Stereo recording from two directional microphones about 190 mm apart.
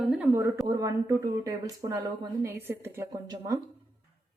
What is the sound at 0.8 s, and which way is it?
A woman's voice, 15° right (ahead or behind).